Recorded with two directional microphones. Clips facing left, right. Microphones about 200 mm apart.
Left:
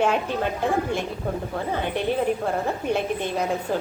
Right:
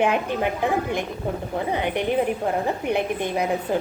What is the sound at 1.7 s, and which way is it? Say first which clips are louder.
A woman's voice: right 1 dB; 15° right (ahead or behind).